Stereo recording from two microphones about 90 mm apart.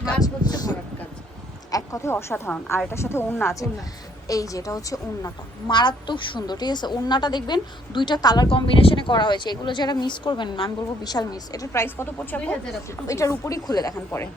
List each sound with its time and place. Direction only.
0.2 s vehicle: 45° left (ahead or behind)
1.7 s a woman's voice: 35° left (ahead or behind)
4.3 s a woman's voice: 40° left (ahead or behind)
5.6 s speech: 60° left (ahead or behind)
8.4 s speech: 85° left; by 11.7 s 45° left (ahead or behind)
11.7 s a woman's voice: 30° left (ahead or behind)
13.1 s a woman's voice: 35° left (ahead or behind)
13.7 s speech: 45° left (ahead or behind)